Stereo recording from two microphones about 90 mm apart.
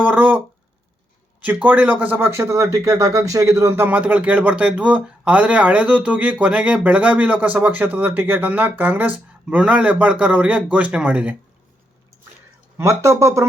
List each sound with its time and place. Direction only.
0.0 s a sound: 20° right (ahead or behind)
1.4 s speech: 15° right (ahead or behind); by 3.8 s 30° right (ahead or behind)
3.8 s speech: 15° right (ahead or behind)
12.7 s speech: 30° right (ahead or behind)